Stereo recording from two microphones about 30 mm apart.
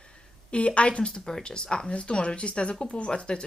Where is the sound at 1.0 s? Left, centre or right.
Left.